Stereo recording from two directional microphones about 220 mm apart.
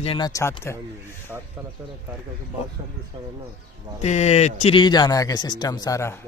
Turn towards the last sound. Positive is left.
turn(degrees=15)  # may be behind; listen again after turning